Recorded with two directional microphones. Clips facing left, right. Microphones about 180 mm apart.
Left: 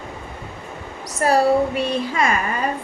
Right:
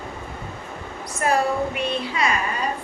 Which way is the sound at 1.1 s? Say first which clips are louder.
Left 5 dB; 35° left (ahead or behind).